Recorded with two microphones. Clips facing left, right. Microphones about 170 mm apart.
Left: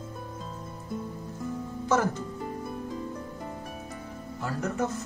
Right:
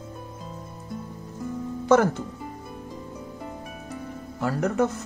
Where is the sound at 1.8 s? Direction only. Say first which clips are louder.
Right 7 dB; 65° right (ahead or behind).